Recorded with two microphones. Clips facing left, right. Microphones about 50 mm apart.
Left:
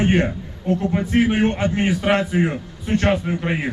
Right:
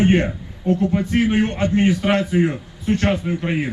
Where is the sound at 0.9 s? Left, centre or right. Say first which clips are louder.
Even; centre.